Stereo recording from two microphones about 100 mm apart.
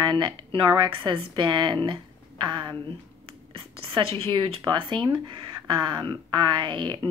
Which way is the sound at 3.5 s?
65° right (ahead or behind).